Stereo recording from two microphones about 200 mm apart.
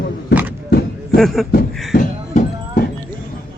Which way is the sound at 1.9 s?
40° left (ahead or behind).